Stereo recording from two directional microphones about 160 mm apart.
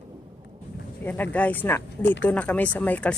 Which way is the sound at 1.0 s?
10° left (ahead or behind).